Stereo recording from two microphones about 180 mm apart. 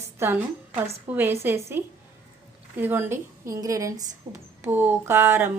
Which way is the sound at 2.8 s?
10° right (ahead or behind).